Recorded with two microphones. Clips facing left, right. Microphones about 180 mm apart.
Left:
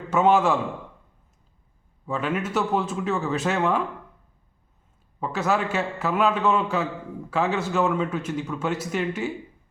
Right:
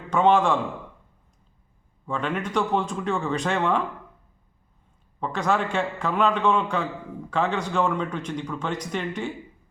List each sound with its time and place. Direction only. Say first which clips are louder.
0.1 s a man's voice: even; 5° left (ahead or behind)
2.0 s a man's voice: left 1 dB; 5° left (ahead or behind)
5.2 s a man's voice: even; 5° left (ahead or behind)